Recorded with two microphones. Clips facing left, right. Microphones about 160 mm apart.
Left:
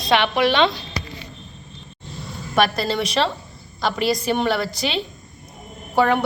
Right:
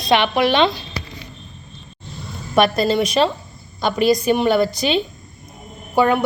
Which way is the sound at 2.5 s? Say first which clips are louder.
Right 4 dB; 20° right (ahead or behind).